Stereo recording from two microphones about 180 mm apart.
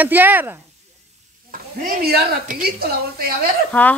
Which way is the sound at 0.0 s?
10° right (ahead or behind).